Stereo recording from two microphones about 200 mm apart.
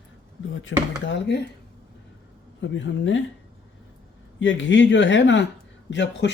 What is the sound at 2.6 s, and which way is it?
Speech, 65° left (ahead or behind).